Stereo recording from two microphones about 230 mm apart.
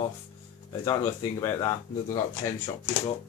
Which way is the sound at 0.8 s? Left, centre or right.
Centre.